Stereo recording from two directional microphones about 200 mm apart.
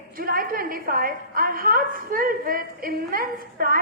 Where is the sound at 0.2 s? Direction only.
45° right (ahead or behind).